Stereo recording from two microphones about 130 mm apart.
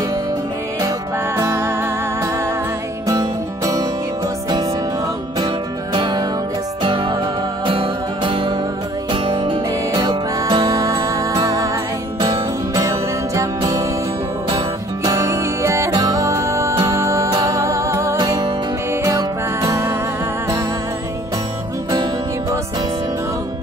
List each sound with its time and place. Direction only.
0.7 s music: 25° right (ahead or behind)
3.1 s music: 25° right (ahead or behind)
5.9 s music: 35° right (ahead or behind)
9.9 s music: 30° right (ahead or behind)
12.7 s music: 25° right (ahead or behind)
15.0 s music: 25° right (ahead or behind)